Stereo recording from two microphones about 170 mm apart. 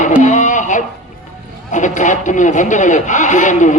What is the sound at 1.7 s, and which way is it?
Speech, 45° left (ahead or behind).